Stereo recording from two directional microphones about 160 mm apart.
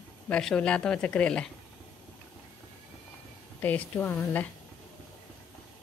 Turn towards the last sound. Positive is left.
turn(degrees=10)  # may be behind; listen again after turning